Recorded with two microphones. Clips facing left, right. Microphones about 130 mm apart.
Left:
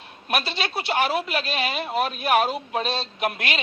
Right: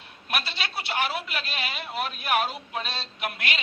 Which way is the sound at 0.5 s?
50° left (ahead or behind).